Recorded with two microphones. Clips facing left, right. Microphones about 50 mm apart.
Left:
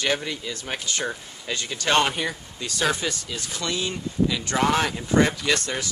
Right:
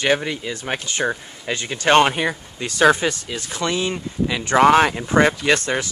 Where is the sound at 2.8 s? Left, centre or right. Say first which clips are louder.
Right 9 dB; right.